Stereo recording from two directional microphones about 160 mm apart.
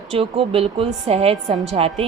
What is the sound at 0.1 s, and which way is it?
Speech, 35° right (ahead or behind).